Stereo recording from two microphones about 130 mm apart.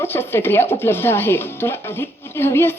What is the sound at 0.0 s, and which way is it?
Speech, 15° left (ahead or behind).